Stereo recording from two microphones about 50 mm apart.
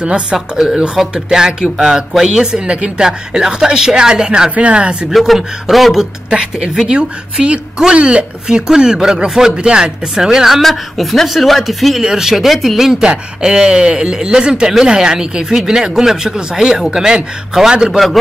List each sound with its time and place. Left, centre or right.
0.0 s speech: centre
5.1 s speech: centre
6.9 s speech: centre
10.6 s speech: centre
13.0 s speech: centre